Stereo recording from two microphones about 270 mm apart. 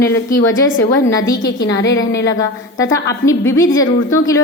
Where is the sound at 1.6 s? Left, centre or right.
Left.